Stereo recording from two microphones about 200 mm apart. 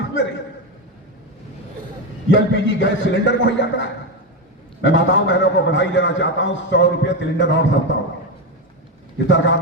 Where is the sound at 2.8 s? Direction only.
65° left (ahead or behind).